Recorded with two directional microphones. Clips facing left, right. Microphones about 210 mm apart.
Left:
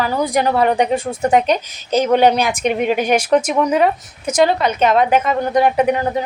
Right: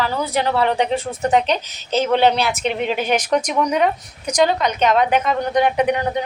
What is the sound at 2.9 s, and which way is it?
A woman's voice, 10° left (ahead or behind).